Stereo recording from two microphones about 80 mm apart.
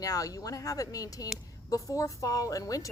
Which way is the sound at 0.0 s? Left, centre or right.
Left.